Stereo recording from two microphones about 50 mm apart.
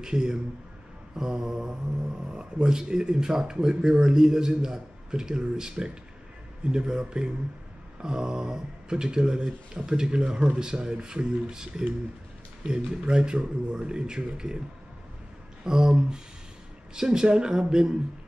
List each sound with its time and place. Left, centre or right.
0.0 s speech: centre
15.6 s speech: centre